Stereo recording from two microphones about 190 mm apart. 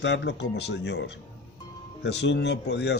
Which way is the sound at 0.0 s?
65° left (ahead or behind).